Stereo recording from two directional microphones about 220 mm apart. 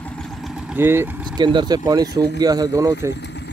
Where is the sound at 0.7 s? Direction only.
10° right (ahead or behind).